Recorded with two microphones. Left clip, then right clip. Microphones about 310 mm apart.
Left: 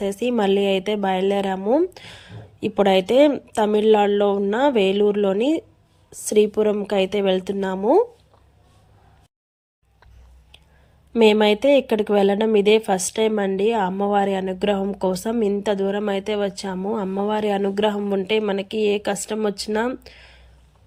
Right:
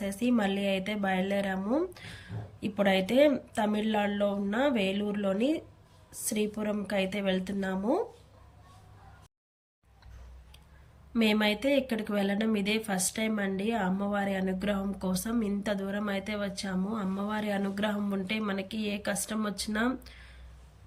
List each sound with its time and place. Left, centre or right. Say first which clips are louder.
0.0 s speech: left 9 dB; centre
11.2 s speech: left 12 dB; centre